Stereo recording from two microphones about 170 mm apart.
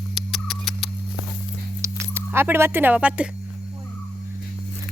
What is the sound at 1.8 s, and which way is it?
Speech, 15° right (ahead or behind).